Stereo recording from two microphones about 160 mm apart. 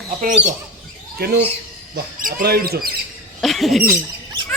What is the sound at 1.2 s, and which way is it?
Speech, 90° right.